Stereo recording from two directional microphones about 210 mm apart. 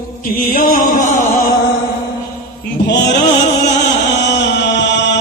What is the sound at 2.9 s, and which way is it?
Chant, 55° left (ahead or behind).